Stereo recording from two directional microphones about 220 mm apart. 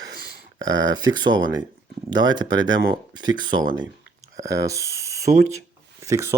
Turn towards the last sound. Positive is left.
turn(degrees=-10)  # may be behind; listen again after turning